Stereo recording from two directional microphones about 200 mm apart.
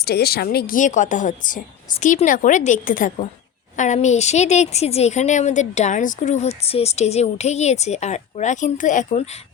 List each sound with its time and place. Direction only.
0.0 s a woman's voice: 50° left (ahead or behind)